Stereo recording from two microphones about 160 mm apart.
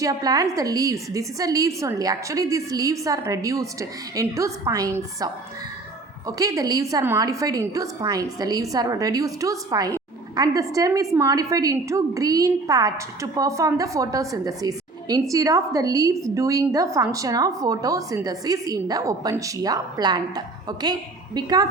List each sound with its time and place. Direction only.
0.0 s a woman's voice: 25° right (ahead or behind)